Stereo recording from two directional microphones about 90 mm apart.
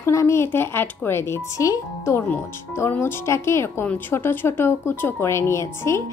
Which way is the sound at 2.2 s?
20° left (ahead or behind).